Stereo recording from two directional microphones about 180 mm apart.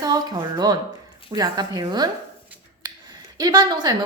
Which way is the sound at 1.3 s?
20° right (ahead or behind).